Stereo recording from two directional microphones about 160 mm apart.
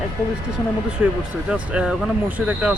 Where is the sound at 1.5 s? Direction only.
5° right (ahead or behind).